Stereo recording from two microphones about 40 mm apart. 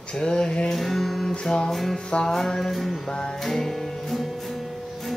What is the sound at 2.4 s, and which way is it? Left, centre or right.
Music, centre.